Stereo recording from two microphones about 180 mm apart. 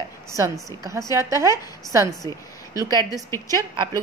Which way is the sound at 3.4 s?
25° right (ahead or behind).